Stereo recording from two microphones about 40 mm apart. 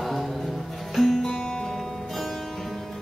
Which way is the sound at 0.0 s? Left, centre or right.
Centre.